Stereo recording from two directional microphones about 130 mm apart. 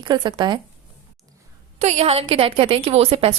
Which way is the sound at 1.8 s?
55° right (ahead or behind).